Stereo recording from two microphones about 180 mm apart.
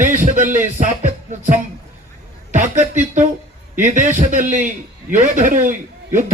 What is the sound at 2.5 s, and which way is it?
A man's voice, 45° right (ahead or behind).